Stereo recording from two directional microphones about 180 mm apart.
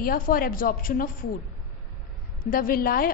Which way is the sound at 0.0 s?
50° left (ahead or behind).